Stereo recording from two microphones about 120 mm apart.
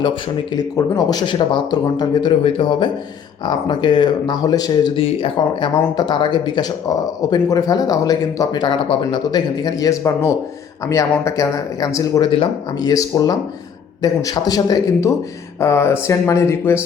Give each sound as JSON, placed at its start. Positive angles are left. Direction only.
{"t": 0.0, "sound": "speech", "side_deg": 35}
{"t": 2.4, "sound": "speech", "side_deg": 50}
{"t": 4.9, "sound": "speech", "side_deg": 45}